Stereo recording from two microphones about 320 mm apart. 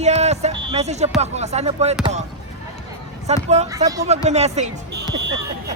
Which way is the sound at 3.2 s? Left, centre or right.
Right.